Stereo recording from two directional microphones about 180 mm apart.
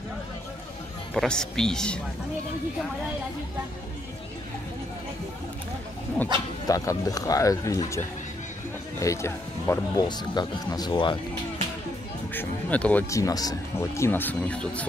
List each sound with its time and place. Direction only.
1.1 s speech: 5° left (ahead or behind)
6.2 s speech: 5° left (ahead or behind)
6.7 s speech: 20° left (ahead or behind)
9.0 s speech: 15° left (ahead or behind)
12.4 s speech: 10° left (ahead or behind)